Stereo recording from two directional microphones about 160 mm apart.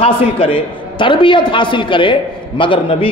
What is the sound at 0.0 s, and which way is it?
A man's voice, 35° left (ahead or behind).